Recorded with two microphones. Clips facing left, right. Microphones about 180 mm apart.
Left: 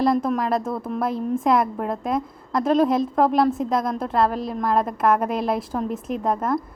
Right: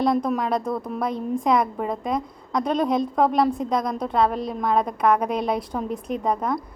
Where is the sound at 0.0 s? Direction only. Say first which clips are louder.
Left 1 dB; centre (ahead or behind).